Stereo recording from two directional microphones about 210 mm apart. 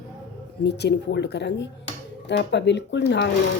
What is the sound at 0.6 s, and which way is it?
Speech, 55° left (ahead or behind).